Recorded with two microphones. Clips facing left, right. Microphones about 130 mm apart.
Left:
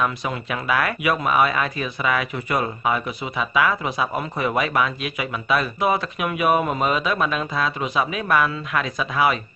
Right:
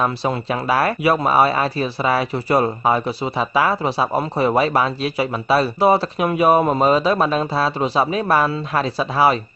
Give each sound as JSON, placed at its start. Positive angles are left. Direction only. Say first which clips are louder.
{"t": 0.0, "sound": "speech", "louder": "right 4 dB", "side_deg": -35}